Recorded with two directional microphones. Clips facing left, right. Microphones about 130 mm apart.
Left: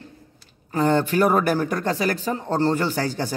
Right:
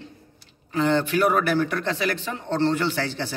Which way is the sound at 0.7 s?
45° left (ahead or behind).